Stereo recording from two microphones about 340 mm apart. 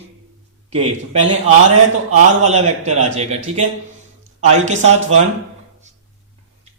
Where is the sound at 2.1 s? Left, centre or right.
Centre.